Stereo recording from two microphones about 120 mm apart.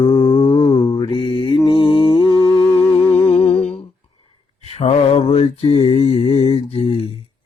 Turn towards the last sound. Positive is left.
turn(degrees=55)  # may be behind; listen again after turning